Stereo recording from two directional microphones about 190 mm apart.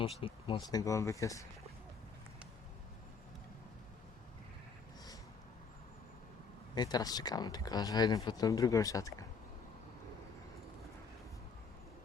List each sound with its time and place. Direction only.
0.0 s speech: 30° left (ahead or behind)
6.7 s speech: 20° left (ahead or behind)